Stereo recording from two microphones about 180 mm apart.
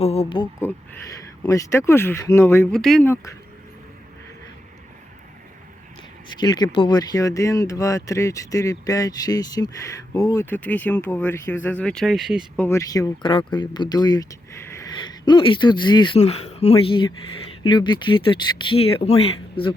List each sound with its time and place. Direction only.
0.0 s speech: 35° left (ahead or behind)
0.6 s speech: 15° left (ahead or behind)
6.4 s speech: 25° left (ahead or behind); by 12.6 s centre (ahead or behind)
12.6 s speech: 15° left (ahead or behind)